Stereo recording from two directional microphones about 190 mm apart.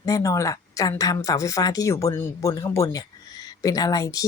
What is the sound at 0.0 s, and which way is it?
Speech, 20° left (ahead or behind).